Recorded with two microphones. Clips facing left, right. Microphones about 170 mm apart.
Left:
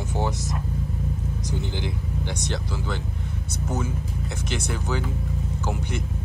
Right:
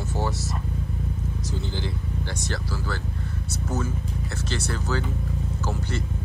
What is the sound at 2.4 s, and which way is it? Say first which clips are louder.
Speech: left 1 dB; 20° left (ahead or behind).